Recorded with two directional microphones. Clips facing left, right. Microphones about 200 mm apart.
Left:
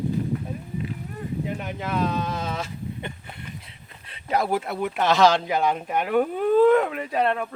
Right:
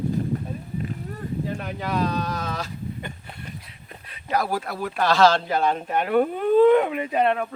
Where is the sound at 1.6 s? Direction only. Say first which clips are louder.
Right 1 dB; 20° left (ahead or behind).